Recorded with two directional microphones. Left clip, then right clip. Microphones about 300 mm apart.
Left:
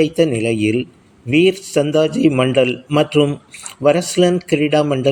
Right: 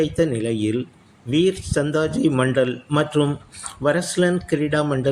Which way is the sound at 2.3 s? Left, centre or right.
Centre.